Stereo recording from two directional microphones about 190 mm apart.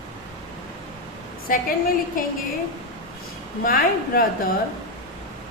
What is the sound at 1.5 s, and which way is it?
Speech, 45° left (ahead or behind).